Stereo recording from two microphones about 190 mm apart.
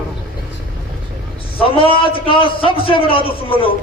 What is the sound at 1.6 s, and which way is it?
A man's voice, 30° left (ahead or behind).